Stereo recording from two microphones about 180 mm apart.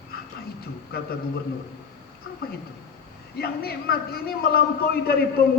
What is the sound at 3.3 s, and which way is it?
A man's voice, 60° left (ahead or behind).